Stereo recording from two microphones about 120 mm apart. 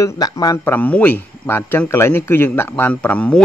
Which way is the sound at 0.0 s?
30° left (ahead or behind).